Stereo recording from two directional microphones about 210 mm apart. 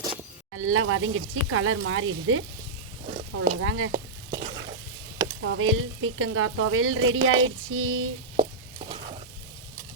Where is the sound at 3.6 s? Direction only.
85° right.